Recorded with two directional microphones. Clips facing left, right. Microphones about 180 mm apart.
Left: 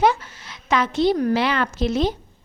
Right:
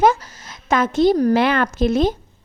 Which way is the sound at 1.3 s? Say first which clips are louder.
Right 4 dB; 50° right (ahead or behind).